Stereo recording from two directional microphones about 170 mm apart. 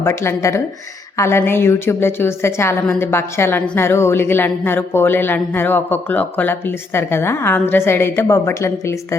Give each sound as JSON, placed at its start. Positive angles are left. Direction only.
{"t": 0.0, "sound": "a woman's voice", "side_deg": 15}